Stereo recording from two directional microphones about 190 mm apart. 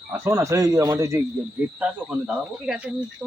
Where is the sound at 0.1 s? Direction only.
15° right (ahead or behind).